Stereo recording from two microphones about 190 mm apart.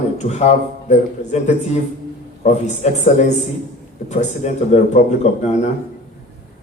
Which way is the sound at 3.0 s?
40° left (ahead or behind).